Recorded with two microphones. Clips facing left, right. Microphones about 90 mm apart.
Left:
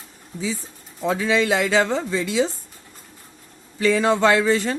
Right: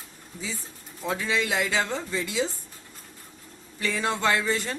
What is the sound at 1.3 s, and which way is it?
Speech, 90° left.